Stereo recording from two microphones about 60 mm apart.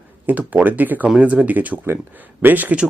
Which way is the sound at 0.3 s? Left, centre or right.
Right.